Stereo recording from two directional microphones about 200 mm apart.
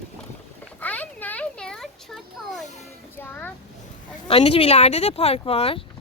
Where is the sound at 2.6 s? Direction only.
35° left (ahead or behind).